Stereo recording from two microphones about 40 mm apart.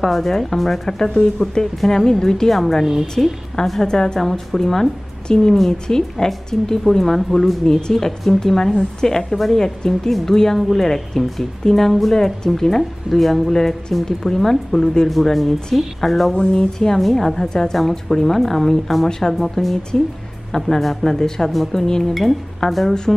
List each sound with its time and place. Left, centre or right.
0.0 s a woman's voice: centre
1.1 s a woman's voice: left
22.1 s a woman's voice: centre